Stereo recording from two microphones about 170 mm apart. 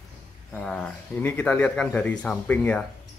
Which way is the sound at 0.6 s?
5° left (ahead or behind).